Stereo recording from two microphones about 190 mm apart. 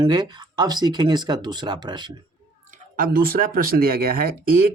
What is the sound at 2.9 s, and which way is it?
Speech, 50° right (ahead or behind).